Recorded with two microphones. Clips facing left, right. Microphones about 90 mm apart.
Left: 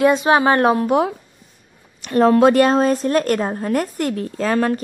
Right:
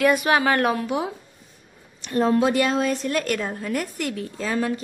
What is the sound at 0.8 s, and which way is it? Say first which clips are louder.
Speech: left 8 dB; 60° left (ahead or behind).